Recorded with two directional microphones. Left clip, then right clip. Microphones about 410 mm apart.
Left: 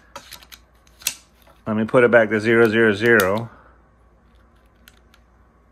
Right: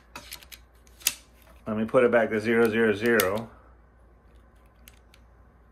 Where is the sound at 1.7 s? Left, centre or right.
Left.